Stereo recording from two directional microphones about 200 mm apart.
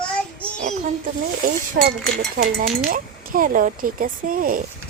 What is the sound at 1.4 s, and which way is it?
Speech, 50° right (ahead or behind).